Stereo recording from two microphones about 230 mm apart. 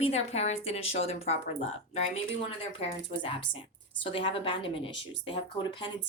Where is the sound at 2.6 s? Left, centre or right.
Left.